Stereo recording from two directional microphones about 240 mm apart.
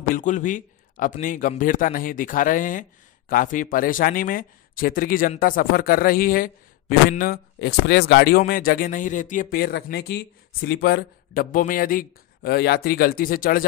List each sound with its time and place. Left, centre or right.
0.1 s speech: left